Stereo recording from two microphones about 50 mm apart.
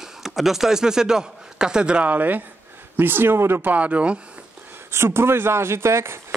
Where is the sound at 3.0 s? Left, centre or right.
Right.